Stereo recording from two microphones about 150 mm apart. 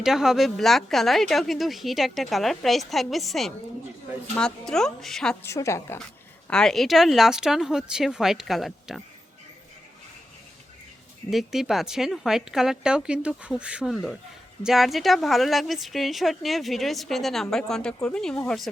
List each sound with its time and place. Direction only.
0.0 s speech: 5° right (ahead or behind)
5.4 s a woman's voice: 20° left (ahead or behind)
6.5 s speech: 5° left (ahead or behind)
11.3 s speech: centre (ahead or behind)